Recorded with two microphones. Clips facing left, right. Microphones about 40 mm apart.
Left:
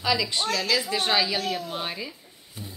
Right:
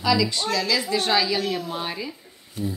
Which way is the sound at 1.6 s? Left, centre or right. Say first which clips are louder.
Right 2 dB; centre.